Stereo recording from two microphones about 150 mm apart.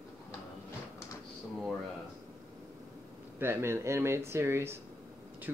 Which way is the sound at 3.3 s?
15° right (ahead or behind).